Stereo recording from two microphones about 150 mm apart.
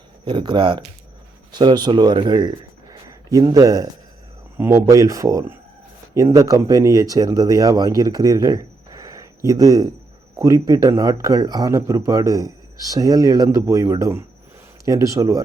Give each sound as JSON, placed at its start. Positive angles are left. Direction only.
{"t": 0.3, "sound": "speech", "side_deg": -30}
{"t": 2.9, "sound": "a sound", "side_deg": -25}
{"t": 4.5, "sound": "speech", "side_deg": -15}